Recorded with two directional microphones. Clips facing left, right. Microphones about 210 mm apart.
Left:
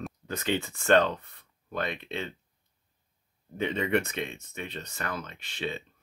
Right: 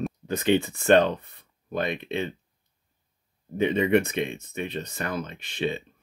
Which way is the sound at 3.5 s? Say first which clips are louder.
Right 6 dB; 15° right (ahead or behind).